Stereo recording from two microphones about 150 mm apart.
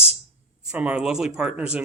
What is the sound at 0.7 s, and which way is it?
Speech, 5° right (ahead or behind).